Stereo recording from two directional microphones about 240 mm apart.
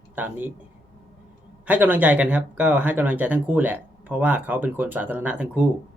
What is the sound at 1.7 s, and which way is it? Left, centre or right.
Speech, centre.